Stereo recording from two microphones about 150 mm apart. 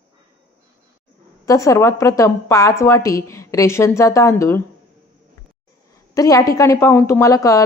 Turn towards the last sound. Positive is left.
turn(degrees=20)  # may be behind; listen again after turning